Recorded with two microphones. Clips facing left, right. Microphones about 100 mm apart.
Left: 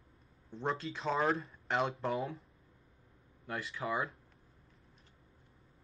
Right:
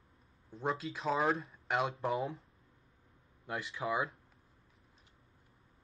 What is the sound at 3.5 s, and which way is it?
Speech, 25° right (ahead or behind).